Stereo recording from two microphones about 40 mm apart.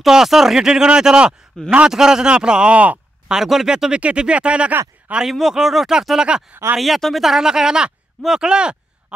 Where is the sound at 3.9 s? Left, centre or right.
Right.